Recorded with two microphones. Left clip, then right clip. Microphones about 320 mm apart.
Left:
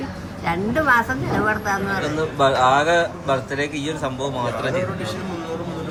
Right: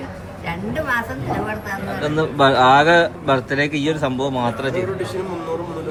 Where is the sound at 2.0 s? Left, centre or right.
Right.